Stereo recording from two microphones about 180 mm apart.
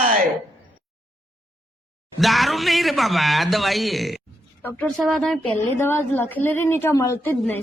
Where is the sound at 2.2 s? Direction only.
Centre (ahead or behind).